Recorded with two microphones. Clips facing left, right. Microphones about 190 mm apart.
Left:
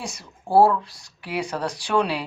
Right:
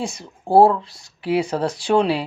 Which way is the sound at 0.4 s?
30° right (ahead or behind).